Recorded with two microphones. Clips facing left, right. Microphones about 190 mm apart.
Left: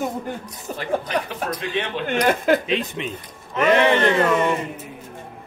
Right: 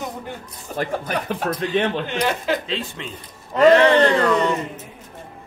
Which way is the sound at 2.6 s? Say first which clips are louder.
Left 4 dB; 20° left (ahead or behind).